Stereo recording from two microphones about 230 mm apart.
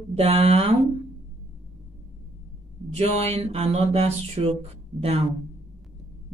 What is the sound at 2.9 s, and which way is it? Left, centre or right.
Speech, right.